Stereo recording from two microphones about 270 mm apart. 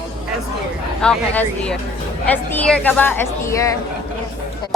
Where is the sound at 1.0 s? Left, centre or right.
Centre.